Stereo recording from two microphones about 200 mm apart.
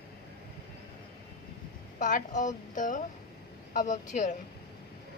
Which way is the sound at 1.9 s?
40° left (ahead or behind).